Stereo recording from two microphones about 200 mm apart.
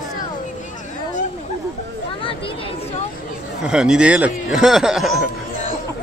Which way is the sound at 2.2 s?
25° left (ahead or behind).